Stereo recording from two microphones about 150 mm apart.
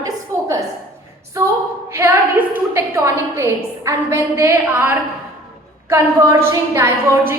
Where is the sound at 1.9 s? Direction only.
15° right (ahead or behind).